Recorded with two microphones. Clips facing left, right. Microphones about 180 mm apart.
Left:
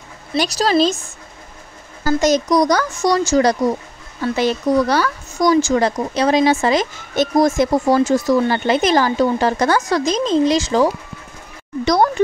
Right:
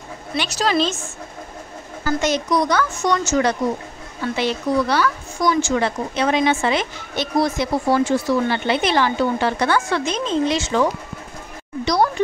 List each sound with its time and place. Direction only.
0.3 s speech: 35° left (ahead or behind)
2.0 s speech: 40° left (ahead or behind)
11.8 s speech: 50° left (ahead or behind)